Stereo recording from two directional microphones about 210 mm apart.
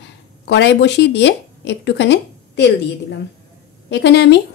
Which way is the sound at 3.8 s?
55° left (ahead or behind).